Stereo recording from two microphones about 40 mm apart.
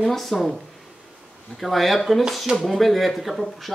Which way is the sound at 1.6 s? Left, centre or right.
Centre.